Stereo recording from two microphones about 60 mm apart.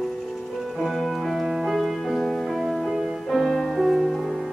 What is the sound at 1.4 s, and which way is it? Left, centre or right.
Music, centre.